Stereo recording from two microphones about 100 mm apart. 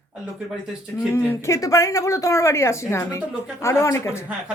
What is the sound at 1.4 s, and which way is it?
A woman's voice, 30° left (ahead or behind).